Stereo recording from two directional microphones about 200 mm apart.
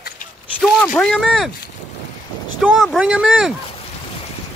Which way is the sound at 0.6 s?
Centre (ahead or behind).